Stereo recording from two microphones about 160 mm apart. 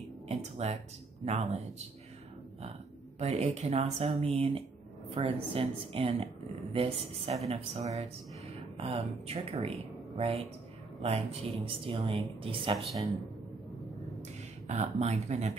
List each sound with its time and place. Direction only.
0.3 s speech: 45° right (ahead or behind)
3.2 s speech: 45° right (ahead or behind)
14.7 s speech: 45° right (ahead or behind)